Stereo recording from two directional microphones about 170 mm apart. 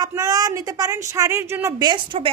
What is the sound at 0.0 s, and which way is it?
A woman's voice, 20° right (ahead or behind).